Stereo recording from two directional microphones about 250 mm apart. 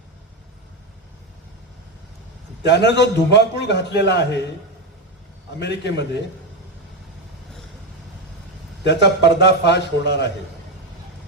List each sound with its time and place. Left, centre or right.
2.6 s a man's voice: left
5.5 s a man's voice: left
8.8 s a man's voice: left